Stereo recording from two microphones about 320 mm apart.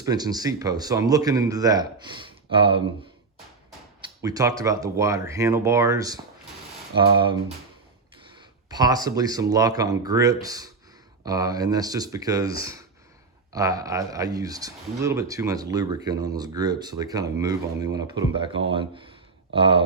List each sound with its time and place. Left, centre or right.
0.0 s speech: centre
4.2 s speech: centre
8.7 s speech: centre